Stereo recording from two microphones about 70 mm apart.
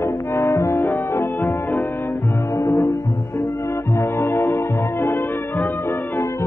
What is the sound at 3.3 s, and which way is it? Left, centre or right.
Music, left.